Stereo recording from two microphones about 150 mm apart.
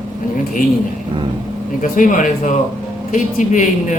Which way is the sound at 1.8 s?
60° left (ahead or behind).